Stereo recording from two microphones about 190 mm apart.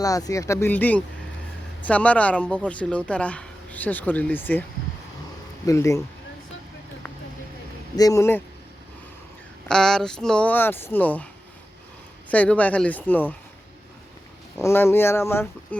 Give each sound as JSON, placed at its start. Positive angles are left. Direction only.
{"t": 0.0, "sound": "speech", "side_deg": 20}
{"t": 5.6, "sound": "speech", "side_deg": 15}
{"t": 7.9, "sound": "speech", "side_deg": 15}
{"t": 9.6, "sound": "speech", "side_deg": 5}
{"t": 12.3, "sound": "speech", "side_deg": 10}
{"t": 14.6, "sound": "speech", "side_deg": 15}